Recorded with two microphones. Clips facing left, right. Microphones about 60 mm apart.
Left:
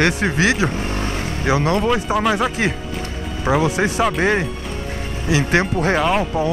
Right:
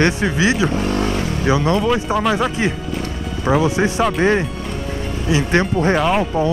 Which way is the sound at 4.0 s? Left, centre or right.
Centre.